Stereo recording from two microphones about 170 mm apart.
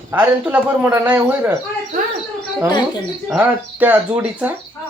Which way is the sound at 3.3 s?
10° right (ahead or behind).